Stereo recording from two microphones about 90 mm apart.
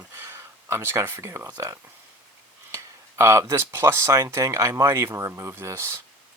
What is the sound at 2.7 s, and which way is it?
Speech, 30° right (ahead or behind).